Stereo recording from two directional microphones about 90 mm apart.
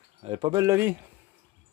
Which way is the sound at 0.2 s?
70° right (ahead or behind).